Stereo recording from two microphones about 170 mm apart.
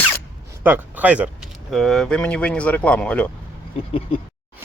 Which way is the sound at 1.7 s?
Centre (ahead or behind).